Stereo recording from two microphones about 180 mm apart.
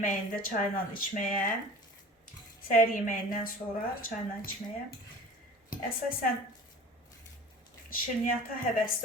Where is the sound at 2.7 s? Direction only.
50° left (ahead or behind).